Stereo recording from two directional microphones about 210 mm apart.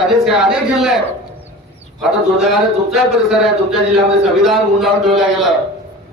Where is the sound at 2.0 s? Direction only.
Centre (ahead or behind).